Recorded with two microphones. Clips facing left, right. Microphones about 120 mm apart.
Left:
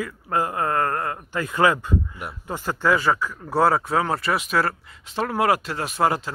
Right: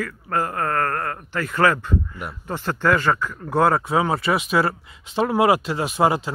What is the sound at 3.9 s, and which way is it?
Speech, 5° right (ahead or behind).